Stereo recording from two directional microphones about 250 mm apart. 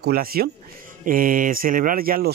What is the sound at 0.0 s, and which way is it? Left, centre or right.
Speech, right.